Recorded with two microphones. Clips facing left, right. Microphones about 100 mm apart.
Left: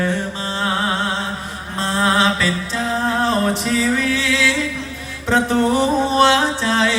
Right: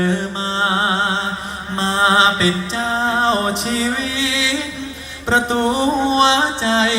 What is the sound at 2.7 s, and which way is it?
Music, 25° right (ahead or behind).